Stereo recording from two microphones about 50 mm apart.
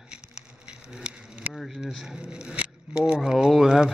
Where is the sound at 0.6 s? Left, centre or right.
Centre.